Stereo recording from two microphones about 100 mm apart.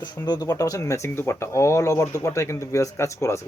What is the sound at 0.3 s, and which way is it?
Speech, 40° left (ahead or behind).